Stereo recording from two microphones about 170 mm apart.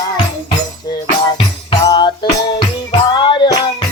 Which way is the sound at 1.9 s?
25° left (ahead or behind).